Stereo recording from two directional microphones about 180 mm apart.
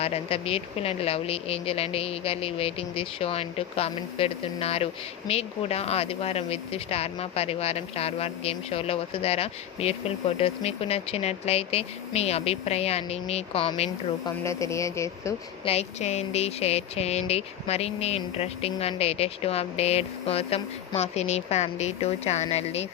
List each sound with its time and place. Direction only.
0.0 s speech: 35° left (ahead or behind)
14.3 s speech: 15° left (ahead or behind)
15.6 s speech: 35° left (ahead or behind)